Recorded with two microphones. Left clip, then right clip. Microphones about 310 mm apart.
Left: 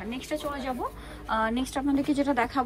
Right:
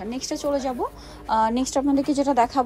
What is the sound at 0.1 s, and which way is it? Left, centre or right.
Speech, centre.